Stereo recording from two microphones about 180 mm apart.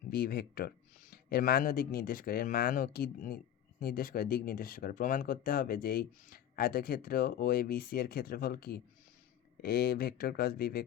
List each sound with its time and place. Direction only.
0.1 s speech: 60° left (ahead or behind)